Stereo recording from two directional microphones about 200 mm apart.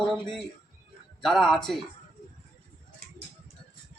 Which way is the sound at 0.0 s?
Centre (ahead or behind).